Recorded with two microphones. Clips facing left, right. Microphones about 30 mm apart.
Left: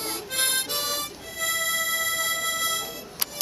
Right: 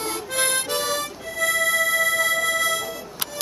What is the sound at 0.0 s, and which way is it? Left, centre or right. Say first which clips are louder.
Music: right 4 dB; centre.